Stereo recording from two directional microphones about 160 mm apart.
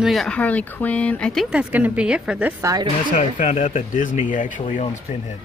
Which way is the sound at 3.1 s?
55° left (ahead or behind).